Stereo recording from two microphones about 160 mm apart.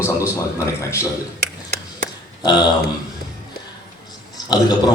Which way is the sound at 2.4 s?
25° left (ahead or behind).